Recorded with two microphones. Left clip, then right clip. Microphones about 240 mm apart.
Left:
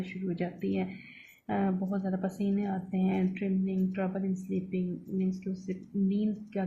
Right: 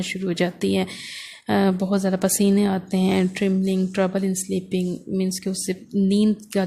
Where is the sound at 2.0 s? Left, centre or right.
Right.